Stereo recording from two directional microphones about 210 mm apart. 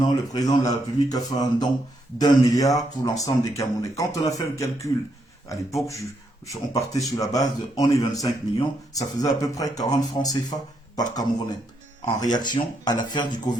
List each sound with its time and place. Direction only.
0.0 s speech: 20° left (ahead or behind)